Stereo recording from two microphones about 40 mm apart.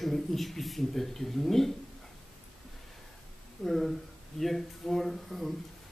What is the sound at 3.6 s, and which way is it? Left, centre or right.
Speech, centre.